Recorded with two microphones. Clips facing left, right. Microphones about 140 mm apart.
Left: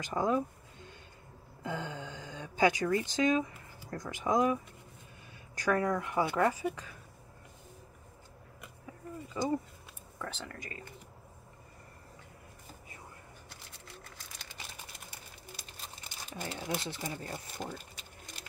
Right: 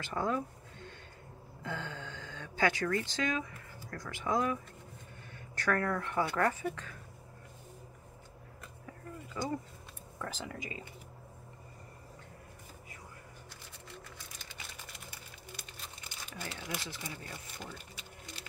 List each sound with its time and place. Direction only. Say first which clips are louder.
0.0 s a sound: left 3 dB; 15° left (ahead or behind)
1.6 s speech: left 3 dB; 15° left (ahead or behind)
5.6 s speech: left 2 dB; 15° left (ahead or behind)
9.3 s speech: left 4 dB; 20° left (ahead or behind)
10.1 s speech: right 1 dB; 5° right (ahead or behind)
10.6 s speech: right 2 dB; 15° right (ahead or behind)
16.3 s speech: left 5 dB; 40° left (ahead or behind)